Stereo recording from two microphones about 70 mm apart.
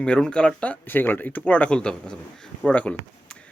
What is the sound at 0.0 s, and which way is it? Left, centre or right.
Speech, centre.